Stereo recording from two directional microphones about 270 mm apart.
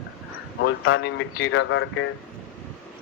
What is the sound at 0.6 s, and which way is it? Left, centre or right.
Speech, left.